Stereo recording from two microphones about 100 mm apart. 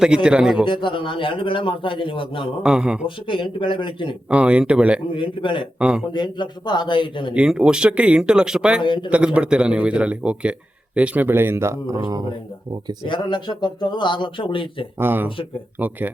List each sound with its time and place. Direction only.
0.0 s speech: 5° right (ahead or behind)
0.6 s a man's voice: 50° left (ahead or behind)
2.6 s speech: 5° right (ahead or behind)
3.2 s a man's voice: 55° left (ahead or behind)
4.3 s speech: 10° right (ahead or behind)
5.1 s a man's voice: 55° left (ahead or behind)
5.8 s speech: 10° right (ahead or behind)
6.1 s speech: 50° left (ahead or behind)
7.3 s speech: 10° right (ahead or behind)
8.8 s speech: 55° left (ahead or behind)
9.0 s speech: 10° right (ahead or behind); by 11.9 s 30° right (ahead or behind)
13.1 s speech: 50° left (ahead or behind)
14.9 s speech: 20° right (ahead or behind)